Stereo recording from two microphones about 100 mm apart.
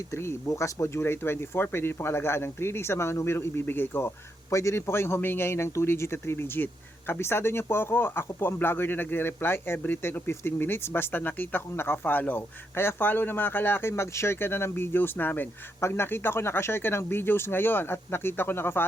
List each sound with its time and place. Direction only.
0.1 s speech: 25° left (ahead or behind)